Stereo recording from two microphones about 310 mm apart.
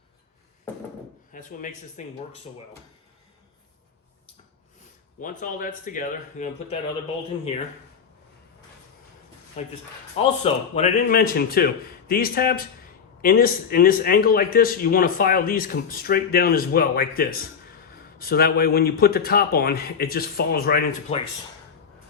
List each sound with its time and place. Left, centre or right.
1.3 s a man's voice: left
5.2 s a man's voice: left
9.6 s a man's voice: left